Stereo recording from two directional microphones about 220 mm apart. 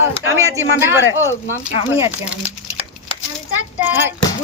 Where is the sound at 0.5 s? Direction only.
10° right (ahead or behind).